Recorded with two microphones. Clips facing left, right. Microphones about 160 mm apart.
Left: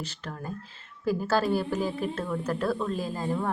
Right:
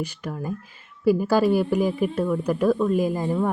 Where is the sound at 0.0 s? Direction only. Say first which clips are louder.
Right 7 dB; 10° right (ahead or behind).